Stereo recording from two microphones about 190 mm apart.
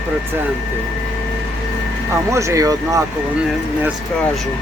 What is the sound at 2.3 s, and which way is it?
Speech, 15° right (ahead or behind).